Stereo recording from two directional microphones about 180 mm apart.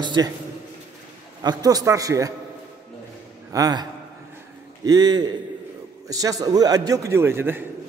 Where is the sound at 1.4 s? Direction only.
20° right (ahead or behind).